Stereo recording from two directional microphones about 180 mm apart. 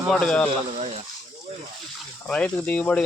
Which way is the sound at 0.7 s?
35° right (ahead or behind).